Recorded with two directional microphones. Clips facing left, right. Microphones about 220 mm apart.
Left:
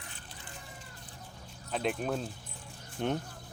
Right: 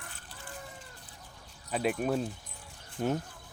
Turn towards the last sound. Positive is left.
turn(degrees=-5)  # may be behind; listen again after turning